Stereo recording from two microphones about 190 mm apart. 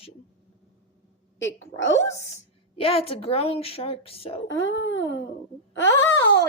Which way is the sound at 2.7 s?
30° left (ahead or behind).